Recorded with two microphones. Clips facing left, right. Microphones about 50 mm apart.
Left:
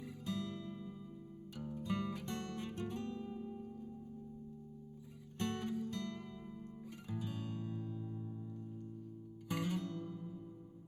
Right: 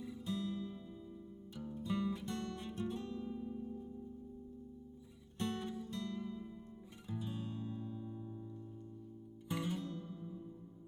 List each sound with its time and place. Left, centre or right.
0.3 s music: left
1.5 s music: left
5.4 s music: left
7.9 s music: centre